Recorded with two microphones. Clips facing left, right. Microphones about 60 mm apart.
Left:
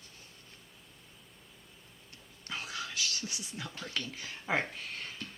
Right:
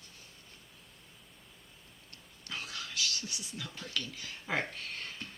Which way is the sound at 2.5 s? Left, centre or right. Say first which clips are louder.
Left 2 dB; centre.